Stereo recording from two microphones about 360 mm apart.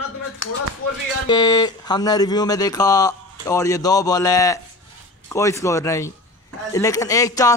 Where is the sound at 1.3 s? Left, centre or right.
Centre.